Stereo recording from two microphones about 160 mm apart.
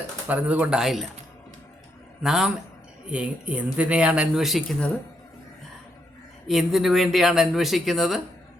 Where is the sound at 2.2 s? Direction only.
5° right (ahead or behind).